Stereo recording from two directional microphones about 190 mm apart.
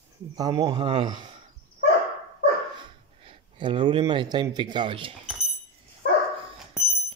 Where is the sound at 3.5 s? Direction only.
25° right (ahead or behind).